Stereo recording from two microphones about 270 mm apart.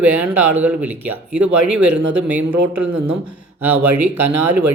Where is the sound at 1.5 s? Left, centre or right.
Right.